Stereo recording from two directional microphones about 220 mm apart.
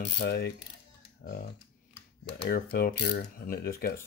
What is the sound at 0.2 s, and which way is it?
Mechanisms, 45° left (ahead or behind).